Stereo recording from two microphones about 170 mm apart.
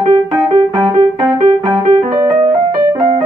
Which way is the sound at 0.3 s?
25° right (ahead or behind).